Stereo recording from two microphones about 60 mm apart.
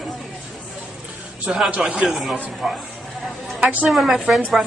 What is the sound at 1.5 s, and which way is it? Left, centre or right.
A woman's voice, centre.